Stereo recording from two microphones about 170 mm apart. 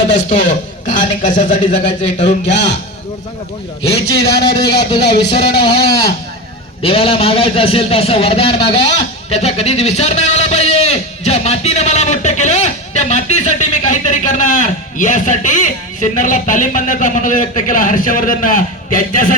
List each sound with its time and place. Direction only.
0.1 s a man's voice: 50° left (ahead or behind)
4.4 s speech: 25° left (ahead or behind)
6.8 s speech: 35° left (ahead or behind); by 19.4 s 55° left (ahead or behind)